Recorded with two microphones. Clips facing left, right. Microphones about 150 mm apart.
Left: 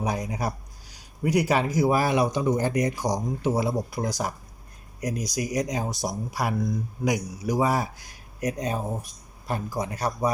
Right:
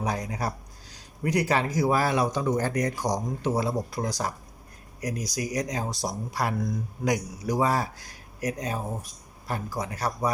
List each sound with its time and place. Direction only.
0.0 s speech: 20° left (ahead or behind)
4.9 s speech: 25° left (ahead or behind)
8.4 s speech: 25° left (ahead or behind)